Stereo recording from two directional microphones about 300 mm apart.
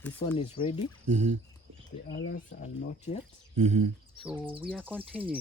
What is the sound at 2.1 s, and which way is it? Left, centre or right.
Speech, left.